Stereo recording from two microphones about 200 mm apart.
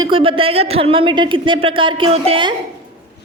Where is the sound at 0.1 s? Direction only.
25° right (ahead or behind).